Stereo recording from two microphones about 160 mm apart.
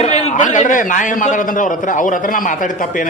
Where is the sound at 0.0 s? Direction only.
45° left (ahead or behind).